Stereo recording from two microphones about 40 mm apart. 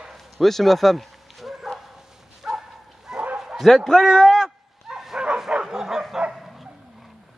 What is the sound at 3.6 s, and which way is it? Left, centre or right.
Speech, centre.